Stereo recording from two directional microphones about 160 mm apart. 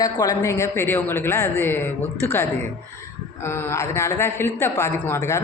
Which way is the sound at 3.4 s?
15° left (ahead or behind).